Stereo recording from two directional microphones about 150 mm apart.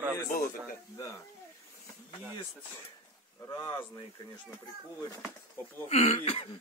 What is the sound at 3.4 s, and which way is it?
Speech, 25° left (ahead or behind).